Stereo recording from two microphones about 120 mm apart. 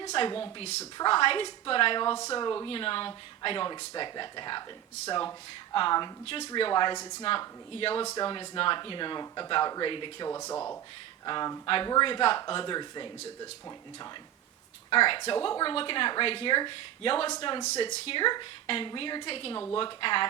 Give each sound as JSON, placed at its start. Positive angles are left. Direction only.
{"t": 0.2, "sound": "speech", "side_deg": 50}
{"t": 0.6, "sound": "speech", "side_deg": 70}
{"t": 0.9, "sound": "speech", "side_deg": 45}
{"t": 2.1, "sound": "speech", "side_deg": 30}
{"t": 2.6, "sound": "speech", "side_deg": 50}
{"t": 5.7, "sound": "speech", "side_deg": 40}
{"t": 7.3, "sound": "speech", "side_deg": 50}
{"t": 10.2, "sound": "speech", "side_deg": 25}
{"t": 11.3, "sound": "speech", "side_deg": 35}
{"t": 14.8, "sound": "speech", "side_deg": 45}